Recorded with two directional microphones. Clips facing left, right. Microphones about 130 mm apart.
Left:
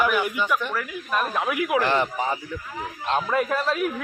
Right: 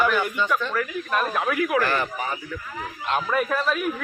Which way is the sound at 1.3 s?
20° left (ahead or behind).